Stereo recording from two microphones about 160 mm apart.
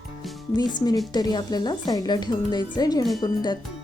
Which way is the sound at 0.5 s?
25° left (ahead or behind).